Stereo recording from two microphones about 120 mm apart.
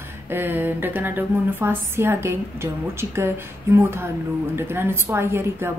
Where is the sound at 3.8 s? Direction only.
20° right (ahead or behind).